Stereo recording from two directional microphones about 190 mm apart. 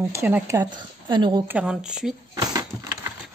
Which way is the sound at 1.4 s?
5° right (ahead or behind).